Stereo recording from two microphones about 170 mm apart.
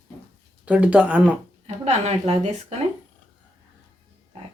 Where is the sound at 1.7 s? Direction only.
40° right (ahead or behind).